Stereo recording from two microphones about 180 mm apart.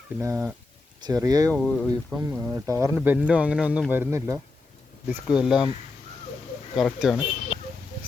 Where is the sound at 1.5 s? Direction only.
5° left (ahead or behind).